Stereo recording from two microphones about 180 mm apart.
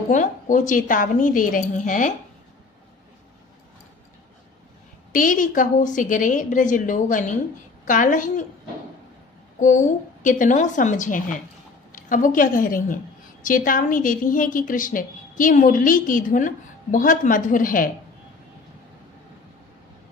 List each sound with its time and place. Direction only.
0.1 s a woman's voice: 45° left (ahead or behind)
5.1 s a woman's voice: 50° left (ahead or behind)
9.6 s a woman's voice: 45° left (ahead or behind)